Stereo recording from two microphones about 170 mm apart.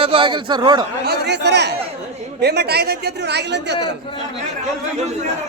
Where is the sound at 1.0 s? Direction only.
70° right (ahead or behind).